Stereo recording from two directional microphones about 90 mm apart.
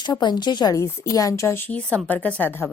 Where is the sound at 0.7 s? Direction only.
35° left (ahead or behind).